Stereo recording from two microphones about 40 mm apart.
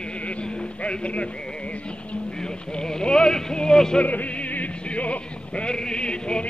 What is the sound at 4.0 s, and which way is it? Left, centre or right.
Music, left.